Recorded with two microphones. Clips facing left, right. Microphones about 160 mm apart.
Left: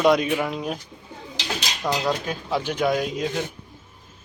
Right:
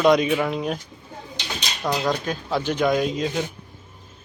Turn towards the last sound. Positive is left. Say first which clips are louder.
# right 2 dB
turn(degrees=10)  # may be behind; listen again after turning